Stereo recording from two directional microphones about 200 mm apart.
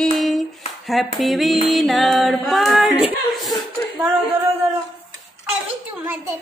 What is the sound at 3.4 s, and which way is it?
Chuckle, centre (ahead or behind).